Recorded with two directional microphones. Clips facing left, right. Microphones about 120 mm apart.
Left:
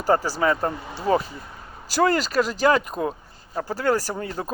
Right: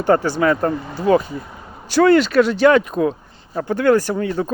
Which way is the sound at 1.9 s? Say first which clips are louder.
Right 8 dB; 35° left (ahead or behind).